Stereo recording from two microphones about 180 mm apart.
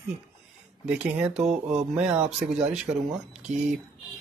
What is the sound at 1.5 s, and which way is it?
Mantra, 35° right (ahead or behind).